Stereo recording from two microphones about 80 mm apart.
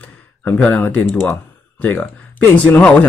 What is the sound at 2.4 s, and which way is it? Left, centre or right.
Speech, left.